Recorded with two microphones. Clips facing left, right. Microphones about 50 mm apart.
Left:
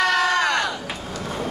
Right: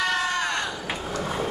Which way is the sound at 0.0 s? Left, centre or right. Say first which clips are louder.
Left 6 dB; left.